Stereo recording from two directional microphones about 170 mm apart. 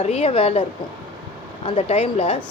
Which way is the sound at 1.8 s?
40° left (ahead or behind).